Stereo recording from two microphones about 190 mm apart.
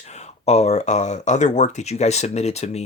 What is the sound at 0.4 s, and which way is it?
Speech, 35° left (ahead or behind).